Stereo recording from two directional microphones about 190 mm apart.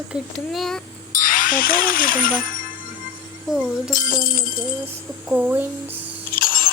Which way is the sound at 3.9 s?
45° left (ahead or behind).